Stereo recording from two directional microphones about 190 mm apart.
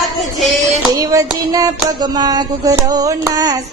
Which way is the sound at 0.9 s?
15° right (ahead or behind).